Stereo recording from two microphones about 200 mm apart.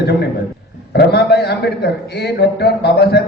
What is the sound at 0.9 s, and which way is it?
A man's voice, 55° left (ahead or behind).